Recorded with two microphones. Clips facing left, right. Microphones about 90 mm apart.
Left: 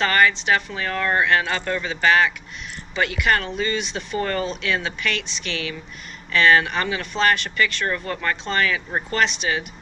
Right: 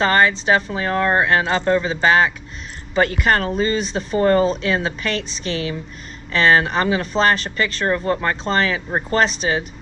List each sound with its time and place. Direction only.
0.0 s speech: 30° right (ahead or behind)
2.9 s speech: 40° right (ahead or behind)